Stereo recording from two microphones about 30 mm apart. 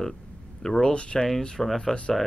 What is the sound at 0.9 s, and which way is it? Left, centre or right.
Speech, left.